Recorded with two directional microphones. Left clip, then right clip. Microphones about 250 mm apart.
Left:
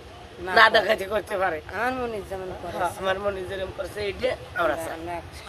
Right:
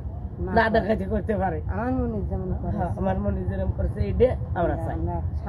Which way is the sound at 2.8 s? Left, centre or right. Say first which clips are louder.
Left 3 dB; centre.